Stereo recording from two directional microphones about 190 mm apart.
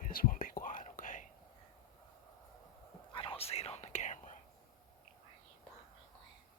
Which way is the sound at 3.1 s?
30° left (ahead or behind).